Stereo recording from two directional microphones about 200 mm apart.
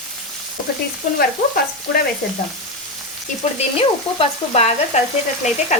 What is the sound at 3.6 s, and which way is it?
Frying, 30° left (ahead or behind).